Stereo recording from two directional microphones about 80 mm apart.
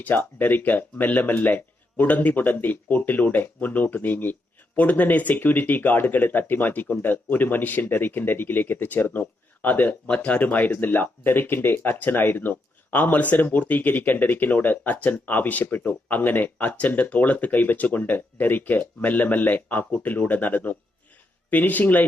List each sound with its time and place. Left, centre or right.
0.0 s speech: left